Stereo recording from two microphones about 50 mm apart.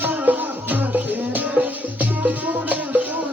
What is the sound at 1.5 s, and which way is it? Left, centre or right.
Music, right.